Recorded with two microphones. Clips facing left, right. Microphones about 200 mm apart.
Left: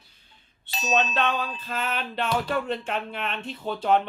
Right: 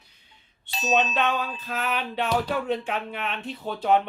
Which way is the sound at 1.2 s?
5° right (ahead or behind).